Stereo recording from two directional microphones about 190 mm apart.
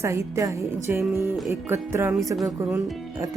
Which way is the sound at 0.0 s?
15° right (ahead or behind).